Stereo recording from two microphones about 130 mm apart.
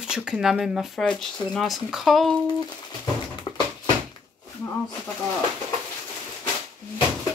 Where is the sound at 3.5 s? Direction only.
40° left (ahead or behind).